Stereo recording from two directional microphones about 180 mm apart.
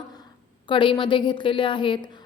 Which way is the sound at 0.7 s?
25° left (ahead or behind).